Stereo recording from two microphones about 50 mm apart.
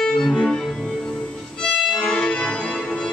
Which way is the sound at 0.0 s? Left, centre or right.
Centre.